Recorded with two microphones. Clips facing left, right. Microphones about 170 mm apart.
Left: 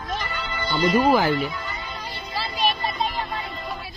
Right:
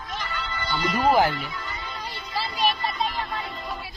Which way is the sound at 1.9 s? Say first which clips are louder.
Right 2 dB; 15° left (ahead or behind).